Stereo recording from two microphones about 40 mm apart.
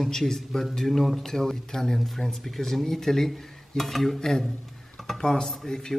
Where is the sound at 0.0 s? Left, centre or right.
Centre.